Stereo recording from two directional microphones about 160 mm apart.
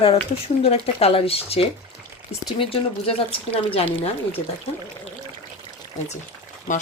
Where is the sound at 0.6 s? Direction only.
40° left (ahead or behind).